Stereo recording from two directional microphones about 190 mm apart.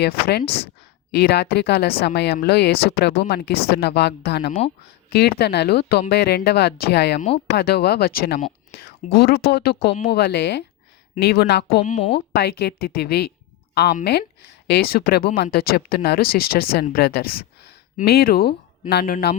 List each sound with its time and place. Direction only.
0.0 s speech: 60° left (ahead or behind)
0.4 s speech: 30° left (ahead or behind)
1.1 s speech: 60° left (ahead or behind)
11.8 s speech: 35° left (ahead or behind)
12.1 s speech: 60° left (ahead or behind)